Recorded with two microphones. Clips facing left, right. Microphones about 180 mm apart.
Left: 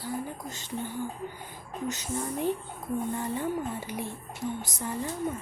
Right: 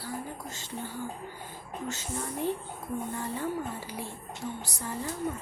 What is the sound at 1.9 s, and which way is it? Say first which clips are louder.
Speech: left 4 dB; 15° left (ahead or behind).